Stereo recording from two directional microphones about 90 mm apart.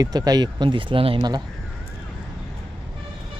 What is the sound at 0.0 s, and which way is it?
Speech, 45° right (ahead or behind).